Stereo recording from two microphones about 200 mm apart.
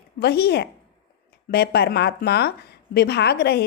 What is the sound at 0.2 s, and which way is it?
A woman's voice, 55° left (ahead or behind).